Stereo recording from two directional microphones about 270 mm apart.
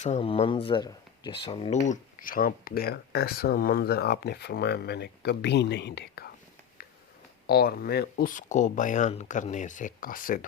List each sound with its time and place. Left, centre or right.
0.0 s speech: left
7.4 s speech: left